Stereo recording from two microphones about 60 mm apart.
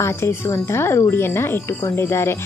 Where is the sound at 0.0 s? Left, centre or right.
Left.